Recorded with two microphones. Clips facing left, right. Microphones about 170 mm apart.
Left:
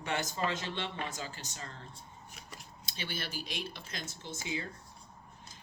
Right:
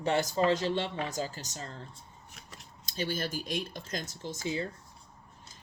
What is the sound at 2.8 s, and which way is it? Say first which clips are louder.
Speech: right 8 dB; 40° right (ahead or behind).